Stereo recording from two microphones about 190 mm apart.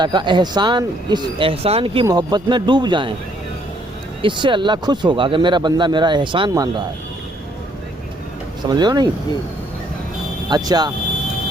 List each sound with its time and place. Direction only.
0.0 s speech: 25° right (ahead or behind)
4.2 s speech: 25° right (ahead or behind)
8.6 s speech: 20° right (ahead or behind)
10.5 s speech: 20° right (ahead or behind)